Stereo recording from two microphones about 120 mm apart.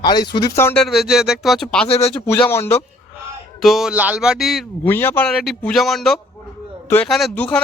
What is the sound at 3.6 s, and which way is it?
Speech, centre (ahead or behind).